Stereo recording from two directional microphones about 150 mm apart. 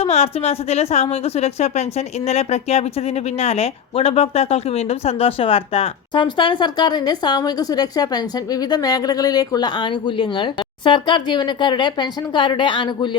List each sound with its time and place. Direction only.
0.0 s a woman's voice: 40° left (ahead or behind)